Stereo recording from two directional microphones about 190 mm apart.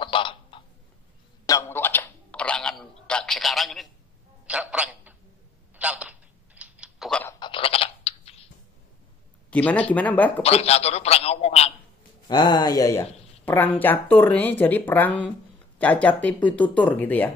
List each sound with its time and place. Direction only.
0.0 s a sound: 25° left (ahead or behind)
1.4 s a sound: 15° left (ahead or behind); by 3.9 s centre (ahead or behind)
4.5 s telephone: 5° right (ahead or behind)
5.8 s typing: 5° right (ahead or behind)
7.3 s scratch: 25° left (ahead or behind)
9.5 s speech: 5° left (ahead or behind)
10.4 s a man's voice: 35° left (ahead or behind)
12.3 s speech: 20° left (ahead or behind)